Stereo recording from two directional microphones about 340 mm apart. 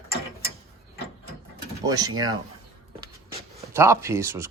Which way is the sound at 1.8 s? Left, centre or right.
Centre.